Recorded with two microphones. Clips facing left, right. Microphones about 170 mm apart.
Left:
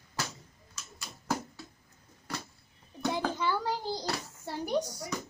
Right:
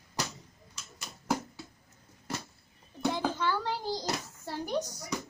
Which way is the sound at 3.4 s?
10° left (ahead or behind).